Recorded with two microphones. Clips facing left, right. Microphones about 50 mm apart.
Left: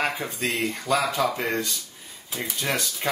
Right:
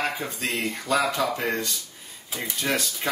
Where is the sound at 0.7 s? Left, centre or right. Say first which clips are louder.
Right 2 dB; centre.